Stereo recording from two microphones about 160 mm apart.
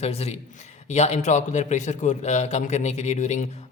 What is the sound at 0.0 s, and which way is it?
A man's voice, 40° left (ahead or behind).